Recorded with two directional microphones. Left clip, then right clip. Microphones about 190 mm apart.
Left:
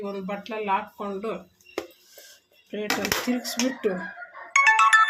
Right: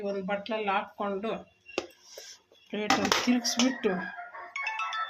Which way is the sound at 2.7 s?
15° right (ahead or behind).